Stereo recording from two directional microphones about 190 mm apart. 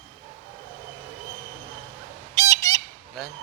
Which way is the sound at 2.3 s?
15° left (ahead or behind).